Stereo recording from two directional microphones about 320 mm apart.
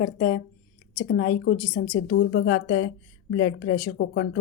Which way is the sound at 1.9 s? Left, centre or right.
Left.